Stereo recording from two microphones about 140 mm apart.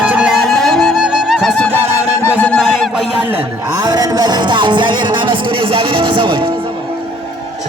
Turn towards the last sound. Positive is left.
turn(degrees=-35)  # may be behind; listen again after turning